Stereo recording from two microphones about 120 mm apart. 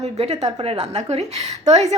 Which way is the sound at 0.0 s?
65° right (ahead or behind).